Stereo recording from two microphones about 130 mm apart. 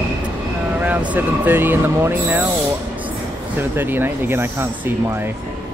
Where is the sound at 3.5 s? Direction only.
15° right (ahead or behind).